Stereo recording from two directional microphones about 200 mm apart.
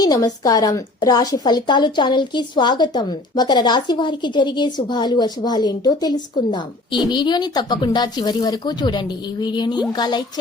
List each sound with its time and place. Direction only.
0.0 s a woman's voice: 20° left (ahead or behind)